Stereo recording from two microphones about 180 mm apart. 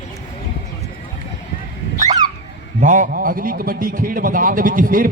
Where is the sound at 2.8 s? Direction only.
45° right (ahead or behind).